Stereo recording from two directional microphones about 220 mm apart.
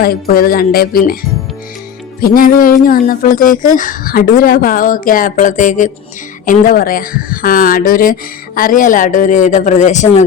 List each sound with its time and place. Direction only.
0.0 s speech: 40° left (ahead or behind)
2.2 s speech: 40° left (ahead or behind)